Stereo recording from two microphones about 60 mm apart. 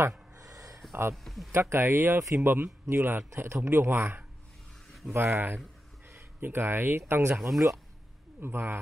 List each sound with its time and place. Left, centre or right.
0.4 s a sound: right
1.1 s speech: centre
1.5 s speech: right
7.3 s speech: centre
8.4 s speech: right